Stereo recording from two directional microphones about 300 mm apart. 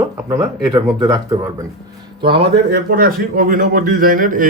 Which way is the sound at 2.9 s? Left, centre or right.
Right.